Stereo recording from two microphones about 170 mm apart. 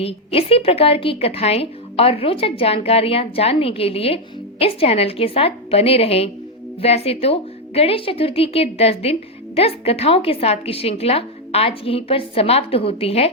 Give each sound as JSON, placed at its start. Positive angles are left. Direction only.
{"t": 0.0, "sound": "a woman's voice", "side_deg": 35}